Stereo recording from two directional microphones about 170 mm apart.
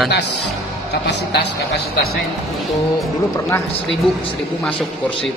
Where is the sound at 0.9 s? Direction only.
85° left.